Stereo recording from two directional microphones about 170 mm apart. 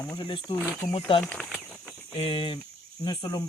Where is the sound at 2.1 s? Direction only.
30° left (ahead or behind).